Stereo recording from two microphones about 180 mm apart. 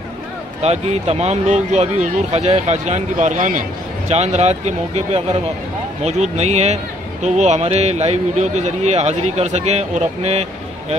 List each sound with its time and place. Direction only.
0.6 s speech: 35° right (ahead or behind)